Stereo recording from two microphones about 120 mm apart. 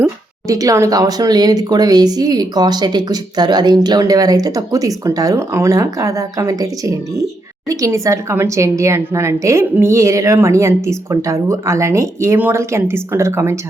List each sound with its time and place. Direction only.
0.0 s a woman's voice: 30° right (ahead or behind)